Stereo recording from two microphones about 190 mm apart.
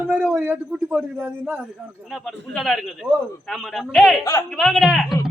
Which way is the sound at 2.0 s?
Centre (ahead or behind).